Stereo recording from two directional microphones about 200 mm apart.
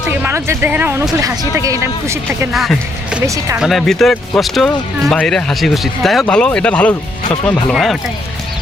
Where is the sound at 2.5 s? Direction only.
Centre (ahead or behind).